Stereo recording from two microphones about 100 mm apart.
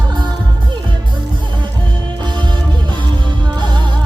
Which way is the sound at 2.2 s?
50° right (ahead or behind).